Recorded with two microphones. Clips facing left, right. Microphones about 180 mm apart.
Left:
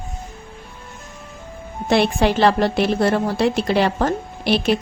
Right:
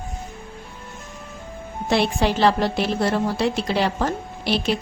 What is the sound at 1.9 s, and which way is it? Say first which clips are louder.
A woman's voice: left 3 dB; 60° left (ahead or behind).